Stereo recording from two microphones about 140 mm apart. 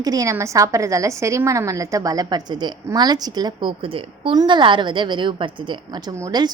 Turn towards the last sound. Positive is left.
turn(degrees=-25)  # may be behind; listen again after turning